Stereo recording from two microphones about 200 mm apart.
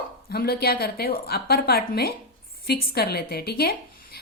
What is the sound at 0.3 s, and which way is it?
A woman's voice, 50° left (ahead or behind).